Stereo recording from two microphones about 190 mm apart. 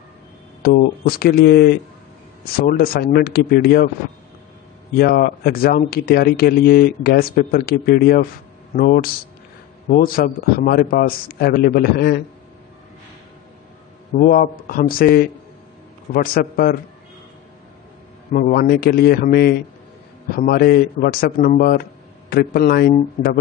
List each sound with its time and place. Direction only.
0.6 s speech: 55° left (ahead or behind)
4.9 s speech: 50° left (ahead or behind)
14.1 s speech: 45° left (ahead or behind)
18.3 s speech: 50° left (ahead or behind)